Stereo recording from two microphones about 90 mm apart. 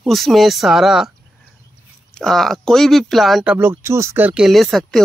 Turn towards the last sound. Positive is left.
turn(degrees=0)  # may be behind; listen again after turning